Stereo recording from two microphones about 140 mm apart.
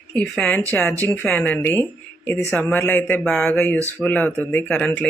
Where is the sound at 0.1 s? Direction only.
5° left (ahead or behind).